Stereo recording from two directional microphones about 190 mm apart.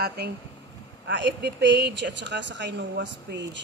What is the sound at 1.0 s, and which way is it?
Speech, 70° right (ahead or behind).